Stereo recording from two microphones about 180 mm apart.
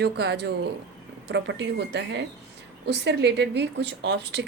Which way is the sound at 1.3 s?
80° right.